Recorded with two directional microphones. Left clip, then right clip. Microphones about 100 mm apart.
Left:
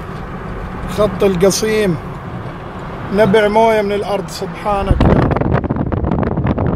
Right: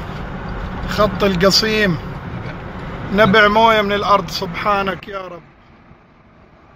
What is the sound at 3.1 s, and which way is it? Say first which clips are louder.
Speech: even; 15° left (ahead or behind).